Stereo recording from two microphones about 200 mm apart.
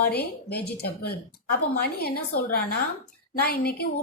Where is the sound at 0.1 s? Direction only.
50° left (ahead or behind).